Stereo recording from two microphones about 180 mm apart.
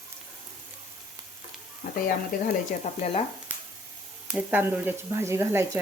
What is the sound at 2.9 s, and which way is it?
Speech, 40° left (ahead or behind).